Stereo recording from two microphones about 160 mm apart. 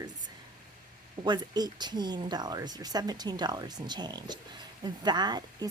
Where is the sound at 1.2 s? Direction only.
25° right (ahead or behind).